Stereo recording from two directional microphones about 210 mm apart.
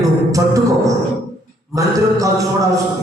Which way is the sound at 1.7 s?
15° right (ahead or behind).